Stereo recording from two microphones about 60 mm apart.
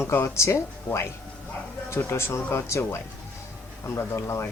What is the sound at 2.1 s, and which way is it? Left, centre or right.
Speech, left.